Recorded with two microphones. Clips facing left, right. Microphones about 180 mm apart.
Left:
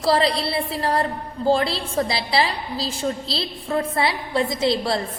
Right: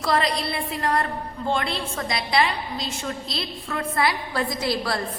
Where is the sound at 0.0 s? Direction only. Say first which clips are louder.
Left 4 dB; 30° left (ahead or behind).